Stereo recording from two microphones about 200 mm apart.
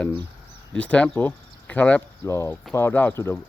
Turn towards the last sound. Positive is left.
turn(degrees=10)  # may be behind; listen again after turning